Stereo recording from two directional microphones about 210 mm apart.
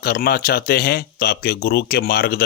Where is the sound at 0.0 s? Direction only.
45° left (ahead or behind).